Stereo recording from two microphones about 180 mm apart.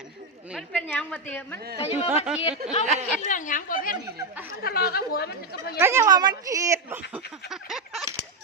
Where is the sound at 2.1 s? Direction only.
10° right (ahead or behind).